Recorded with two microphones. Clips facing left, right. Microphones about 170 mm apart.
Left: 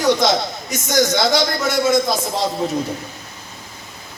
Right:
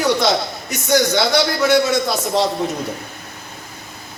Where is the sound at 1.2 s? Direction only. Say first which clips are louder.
Right 2 dB; 65° right (ahead or behind).